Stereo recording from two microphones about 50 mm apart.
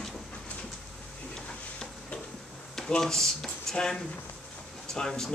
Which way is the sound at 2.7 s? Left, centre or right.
Centre.